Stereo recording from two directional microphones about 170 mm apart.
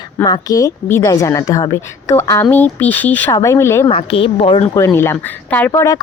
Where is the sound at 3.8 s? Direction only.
35° left (ahead or behind).